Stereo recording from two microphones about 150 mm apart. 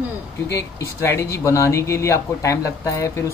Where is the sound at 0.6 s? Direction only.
20° left (ahead or behind).